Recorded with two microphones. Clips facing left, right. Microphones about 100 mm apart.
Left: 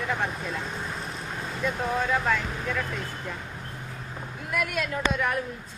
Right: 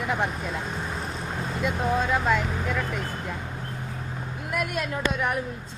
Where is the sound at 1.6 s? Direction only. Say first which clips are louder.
Right 2 dB; 15° right (ahead or behind).